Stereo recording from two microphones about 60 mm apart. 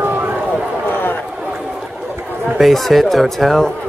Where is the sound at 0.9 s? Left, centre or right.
Left.